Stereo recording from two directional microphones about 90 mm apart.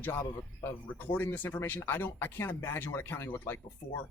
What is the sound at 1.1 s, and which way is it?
Speech, 20° left (ahead or behind).